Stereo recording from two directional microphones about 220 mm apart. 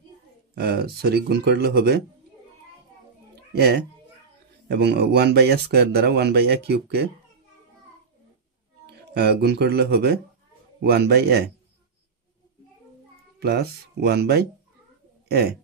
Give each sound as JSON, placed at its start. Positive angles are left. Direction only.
{"t": 0.6, "sound": "speech", "side_deg": -45}
{"t": 3.5, "sound": "speech", "side_deg": -50}
{"t": 8.8, "sound": "speech", "side_deg": -50}
{"t": 13.4, "sound": "speech", "side_deg": -45}